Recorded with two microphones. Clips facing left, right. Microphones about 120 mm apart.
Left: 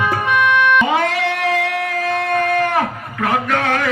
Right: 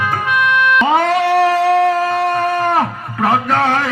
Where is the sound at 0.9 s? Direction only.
40° right (ahead or behind).